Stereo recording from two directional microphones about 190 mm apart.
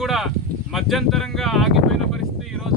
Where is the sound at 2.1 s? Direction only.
Centre (ahead or behind).